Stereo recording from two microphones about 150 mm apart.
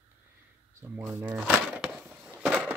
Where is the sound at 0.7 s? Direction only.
10° right (ahead or behind).